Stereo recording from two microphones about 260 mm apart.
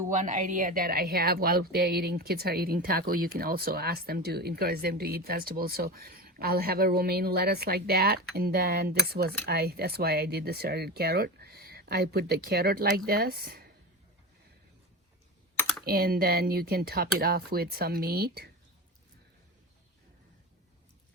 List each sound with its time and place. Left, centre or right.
0.1 s a woman's voice: right
15.5 s computer keyboard: centre
15.8 s a woman's voice: right